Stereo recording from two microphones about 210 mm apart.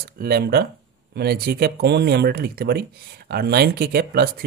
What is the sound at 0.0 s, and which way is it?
Speech, 45° right (ahead or behind).